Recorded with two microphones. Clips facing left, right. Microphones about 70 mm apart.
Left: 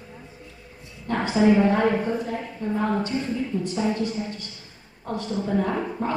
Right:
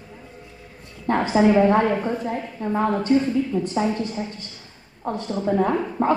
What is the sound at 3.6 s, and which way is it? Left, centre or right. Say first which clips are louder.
Speech: right 2 dB; right.